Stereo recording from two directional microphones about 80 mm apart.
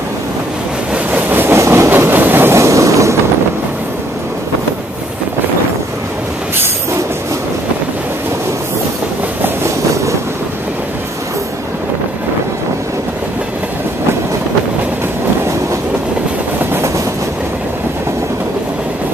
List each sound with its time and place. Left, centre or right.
0.9 s vehicle: right
1.6 s train: right
1.9 s train: right
9.4 s train: right
16.7 s train: right